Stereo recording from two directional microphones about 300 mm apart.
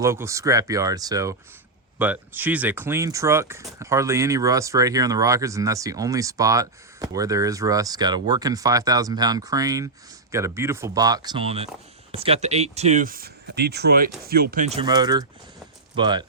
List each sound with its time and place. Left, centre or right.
0.0 s speech: centre